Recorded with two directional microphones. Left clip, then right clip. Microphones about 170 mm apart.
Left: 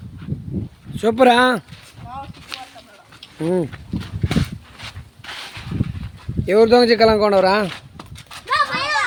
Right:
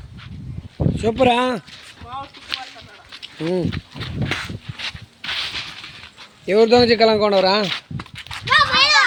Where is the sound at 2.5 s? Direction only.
40° left (ahead or behind).